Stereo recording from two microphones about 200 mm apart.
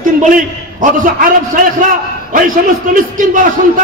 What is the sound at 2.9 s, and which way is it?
Speech, 40° right (ahead or behind).